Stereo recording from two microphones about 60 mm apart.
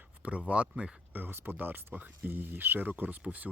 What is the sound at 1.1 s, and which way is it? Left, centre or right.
Speech, right.